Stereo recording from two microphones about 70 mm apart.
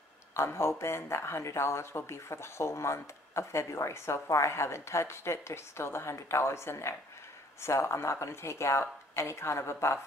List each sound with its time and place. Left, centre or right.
0.4 s speech: left